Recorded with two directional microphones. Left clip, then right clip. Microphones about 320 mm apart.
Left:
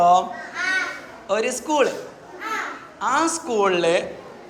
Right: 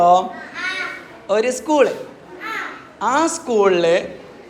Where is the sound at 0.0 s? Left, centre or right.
Centre.